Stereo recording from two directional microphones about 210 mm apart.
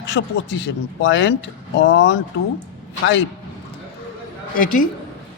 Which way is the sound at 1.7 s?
60° left (ahead or behind).